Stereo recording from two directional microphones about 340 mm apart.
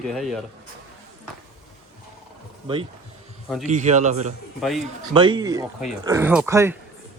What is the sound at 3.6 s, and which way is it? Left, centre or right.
A man's voice, right.